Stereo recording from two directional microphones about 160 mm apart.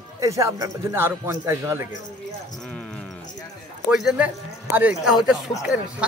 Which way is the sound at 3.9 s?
5° right (ahead or behind).